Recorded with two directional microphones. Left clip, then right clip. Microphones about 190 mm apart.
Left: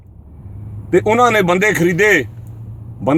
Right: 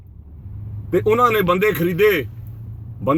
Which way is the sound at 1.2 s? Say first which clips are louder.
Left 3 dB; 5° left (ahead or behind).